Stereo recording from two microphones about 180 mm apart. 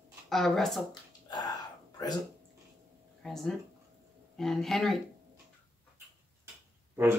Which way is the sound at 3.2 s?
Centre (ahead or behind).